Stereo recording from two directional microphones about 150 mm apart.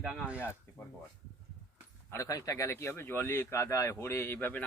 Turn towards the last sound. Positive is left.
turn(degrees=10)  # may be behind; listen again after turning